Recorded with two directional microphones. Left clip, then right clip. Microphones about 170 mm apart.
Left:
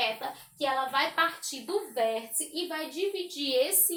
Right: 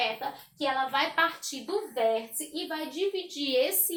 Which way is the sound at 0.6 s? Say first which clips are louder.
Even; 15° right (ahead or behind).